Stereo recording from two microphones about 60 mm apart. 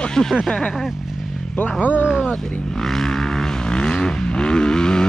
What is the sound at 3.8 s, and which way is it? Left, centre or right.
Vehicle, centre.